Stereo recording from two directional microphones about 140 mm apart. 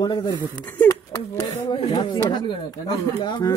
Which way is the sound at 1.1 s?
35° left (ahead or behind).